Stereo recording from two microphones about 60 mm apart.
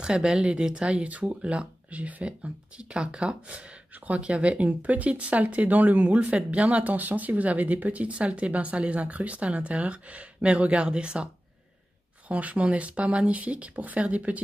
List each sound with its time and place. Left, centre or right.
0.0 s speech: centre
12.3 s speech: right